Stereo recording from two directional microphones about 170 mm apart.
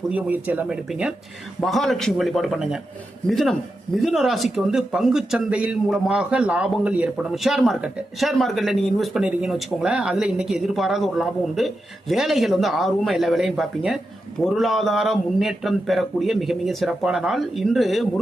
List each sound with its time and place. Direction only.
0.1 s speech: 10° right (ahead or behind)